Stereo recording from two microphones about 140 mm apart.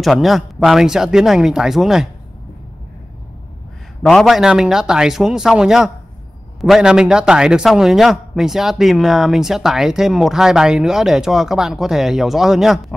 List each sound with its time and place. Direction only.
0.0 s a man's voice: centre (ahead or behind)
4.0 s a man's voice: centre (ahead or behind)